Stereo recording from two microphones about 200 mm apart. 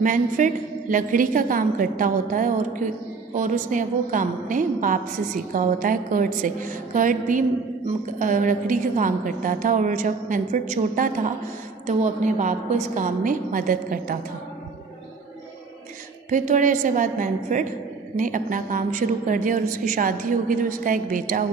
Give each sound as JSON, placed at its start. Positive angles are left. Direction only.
{"t": 0.0, "sound": "a woman's voice", "side_deg": -40}
{"t": 16.3, "sound": "a woman's voice", "side_deg": -40}